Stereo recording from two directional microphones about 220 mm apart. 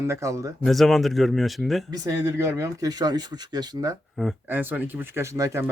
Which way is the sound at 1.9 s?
15° right (ahead or behind).